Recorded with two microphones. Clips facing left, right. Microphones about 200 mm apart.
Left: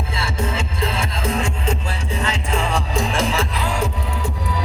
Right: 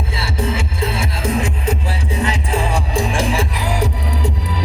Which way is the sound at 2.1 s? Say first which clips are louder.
Right 3 dB; 15° right (ahead or behind).